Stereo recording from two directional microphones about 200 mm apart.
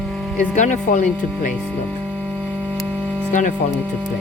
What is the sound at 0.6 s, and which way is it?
Speech, 35° left (ahead or behind).